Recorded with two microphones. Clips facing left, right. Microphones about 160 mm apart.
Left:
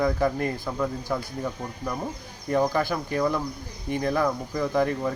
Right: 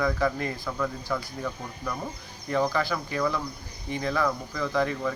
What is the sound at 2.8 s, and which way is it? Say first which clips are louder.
Speech: left 3 dB; 45° left (ahead or behind).